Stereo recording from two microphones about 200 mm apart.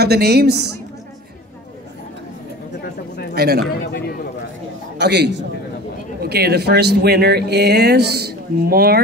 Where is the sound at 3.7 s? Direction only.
55° left (ahead or behind).